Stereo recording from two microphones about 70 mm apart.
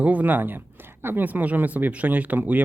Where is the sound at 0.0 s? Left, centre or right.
Right.